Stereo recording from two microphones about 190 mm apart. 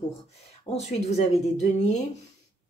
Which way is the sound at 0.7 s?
35° left (ahead or behind).